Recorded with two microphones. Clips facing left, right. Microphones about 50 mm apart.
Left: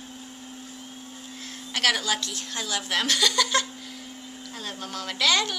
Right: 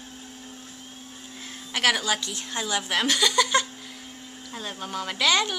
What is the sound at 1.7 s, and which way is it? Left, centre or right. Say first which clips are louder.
A woman's voice: right 1 dB; centre.